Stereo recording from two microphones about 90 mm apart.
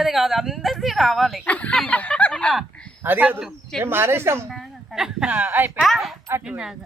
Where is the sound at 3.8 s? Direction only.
25° right (ahead or behind).